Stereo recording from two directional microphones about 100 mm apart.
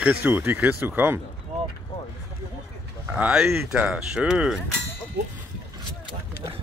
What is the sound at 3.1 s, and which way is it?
Speech, 10° right (ahead or behind).